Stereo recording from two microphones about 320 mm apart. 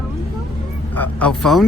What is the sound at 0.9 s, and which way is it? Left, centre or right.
Speech, centre.